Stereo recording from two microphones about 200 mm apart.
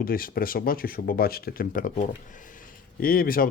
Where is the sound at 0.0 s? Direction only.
45° left (ahead or behind).